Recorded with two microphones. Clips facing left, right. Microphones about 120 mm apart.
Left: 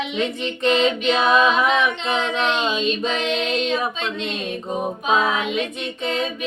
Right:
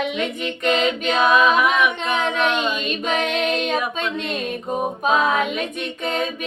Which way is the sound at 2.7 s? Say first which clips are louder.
Left 1 dB; 55° right (ahead or behind).